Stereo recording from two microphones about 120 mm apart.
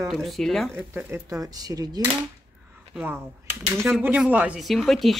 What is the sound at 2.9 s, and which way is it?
Speech, 15° right (ahead or behind).